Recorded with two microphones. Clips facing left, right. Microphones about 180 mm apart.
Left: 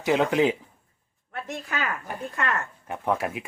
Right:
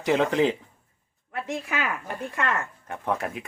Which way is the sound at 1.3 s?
Centre (ahead or behind).